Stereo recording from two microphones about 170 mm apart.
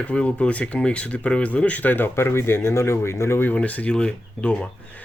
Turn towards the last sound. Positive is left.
turn(degrees=5)  # may be behind; listen again after turning